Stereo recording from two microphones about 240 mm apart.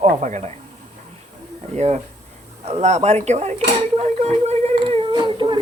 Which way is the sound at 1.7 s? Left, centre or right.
Right.